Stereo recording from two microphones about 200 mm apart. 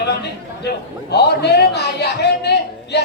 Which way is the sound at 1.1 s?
55° left (ahead or behind).